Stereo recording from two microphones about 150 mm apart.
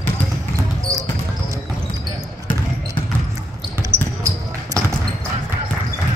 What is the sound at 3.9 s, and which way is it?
Basketball bounce, 15° right (ahead or behind).